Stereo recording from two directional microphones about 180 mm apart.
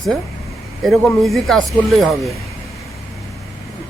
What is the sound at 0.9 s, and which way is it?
A man's voice, centre (ahead or behind).